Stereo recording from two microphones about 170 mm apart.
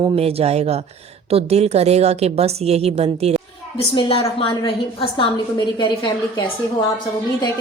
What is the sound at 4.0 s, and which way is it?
A woman's voice, 30° left (ahead or behind).